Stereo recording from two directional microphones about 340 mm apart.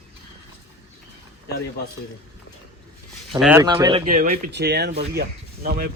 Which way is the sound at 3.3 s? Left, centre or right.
Centre.